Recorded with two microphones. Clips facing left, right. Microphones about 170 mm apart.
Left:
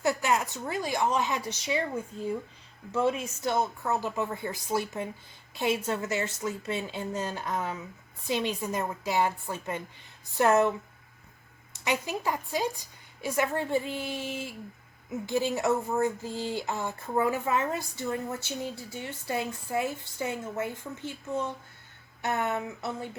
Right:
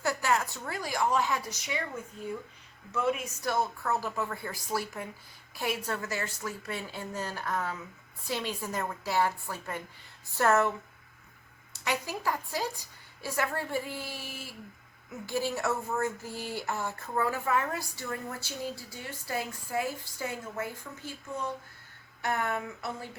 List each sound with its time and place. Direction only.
0.0 s speech: 20° left (ahead or behind)
22.2 s speech: 20° left (ahead or behind)